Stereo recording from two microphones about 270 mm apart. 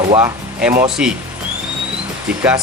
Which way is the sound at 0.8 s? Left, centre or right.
Centre.